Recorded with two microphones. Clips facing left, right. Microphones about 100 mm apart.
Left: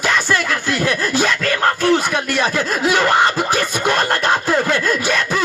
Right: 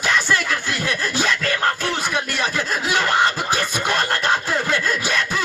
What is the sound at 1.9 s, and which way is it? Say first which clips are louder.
Chuckle: left 6 dB; 55° left (ahead or behind).